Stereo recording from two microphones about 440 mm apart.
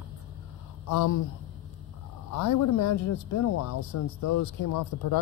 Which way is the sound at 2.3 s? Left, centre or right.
Left.